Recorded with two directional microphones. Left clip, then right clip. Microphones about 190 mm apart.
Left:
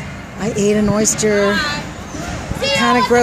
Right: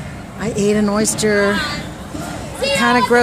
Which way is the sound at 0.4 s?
5° left (ahead or behind).